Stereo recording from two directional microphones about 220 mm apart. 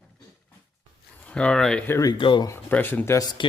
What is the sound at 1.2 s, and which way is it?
Speech, 5° left (ahead or behind).